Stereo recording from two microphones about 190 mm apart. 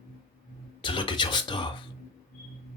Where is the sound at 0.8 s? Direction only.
25° left (ahead or behind).